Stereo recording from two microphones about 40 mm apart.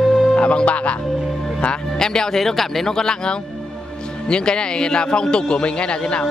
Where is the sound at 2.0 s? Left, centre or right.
Centre.